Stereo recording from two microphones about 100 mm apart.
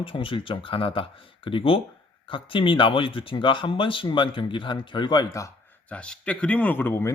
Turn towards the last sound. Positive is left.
turn(degrees=25)  # may be behind; listen again after turning